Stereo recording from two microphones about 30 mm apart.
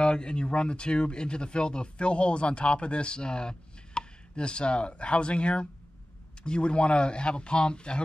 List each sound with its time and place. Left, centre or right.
0.0 s speech: left